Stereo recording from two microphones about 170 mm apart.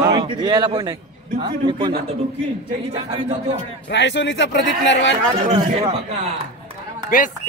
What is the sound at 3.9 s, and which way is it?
A man's voice, 90° left.